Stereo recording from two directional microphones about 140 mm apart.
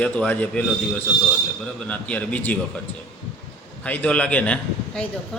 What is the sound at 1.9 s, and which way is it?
Speech, 10° left (ahead or behind).